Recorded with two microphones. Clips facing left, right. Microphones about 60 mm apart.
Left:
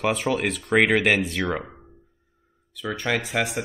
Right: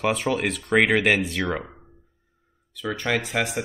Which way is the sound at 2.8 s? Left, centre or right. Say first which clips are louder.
Even; centre.